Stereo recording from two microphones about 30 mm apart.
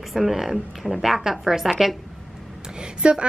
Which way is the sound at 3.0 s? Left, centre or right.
Right.